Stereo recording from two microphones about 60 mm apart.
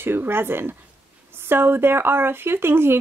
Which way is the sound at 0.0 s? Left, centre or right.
Right.